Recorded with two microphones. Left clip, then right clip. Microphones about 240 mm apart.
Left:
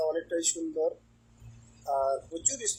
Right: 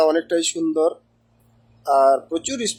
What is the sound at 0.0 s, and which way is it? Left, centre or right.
A man's voice, right.